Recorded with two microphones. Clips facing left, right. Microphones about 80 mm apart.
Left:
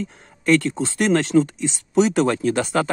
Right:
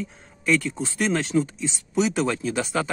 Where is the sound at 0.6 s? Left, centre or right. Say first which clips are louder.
Left 5 dB; left.